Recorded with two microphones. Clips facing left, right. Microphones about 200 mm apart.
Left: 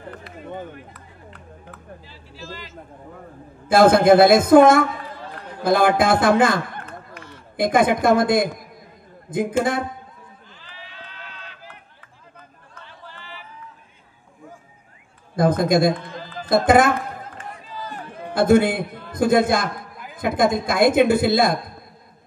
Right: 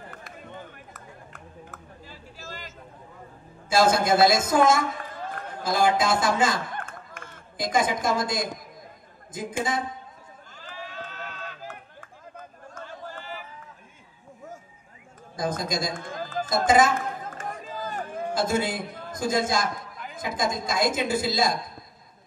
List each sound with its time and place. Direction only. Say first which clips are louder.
0.9 s a sound: left 1 dB; 45° right (ahead or behind)
3.6 s a man's voice: left 8 dB; 55° left (ahead or behind)
4.9 s a sound: left 1 dB; 50° right (ahead or behind)
5.6 s a man's voice: left 6 dB; 60° left (ahead or behind)
6.8 s a sound: left 2 dB; 50° right (ahead or behind)
7.5 s a man's voice: left 7 dB; 60° left (ahead or behind)
10.5 s run: right 8 dB; 45° right (ahead or behind)
12.4 s a sound: right 6 dB; 45° right (ahead or behind)
15.3 s a man's voice: left 11 dB; 60° left (ahead or behind)
15.9 s run: left 5 dB; 45° right (ahead or behind)
16.4 s a man's voice: left 5 dB; 60° left (ahead or behind)
17.3 s run: right 2 dB; 45° right (ahead or behind)
18.3 s a man's voice: left 10 dB; 60° left (ahead or behind)